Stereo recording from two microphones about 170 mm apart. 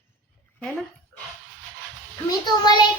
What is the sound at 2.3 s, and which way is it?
Speech, 25° left (ahead or behind).